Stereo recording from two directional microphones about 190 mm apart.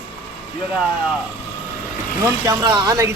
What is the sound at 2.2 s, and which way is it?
Speech, 15° right (ahead or behind).